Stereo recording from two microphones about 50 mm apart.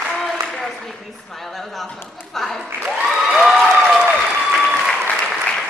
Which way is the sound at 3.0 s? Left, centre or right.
Centre.